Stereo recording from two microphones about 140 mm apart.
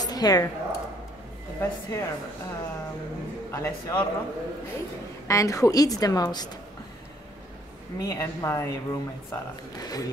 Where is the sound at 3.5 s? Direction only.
20° left (ahead or behind).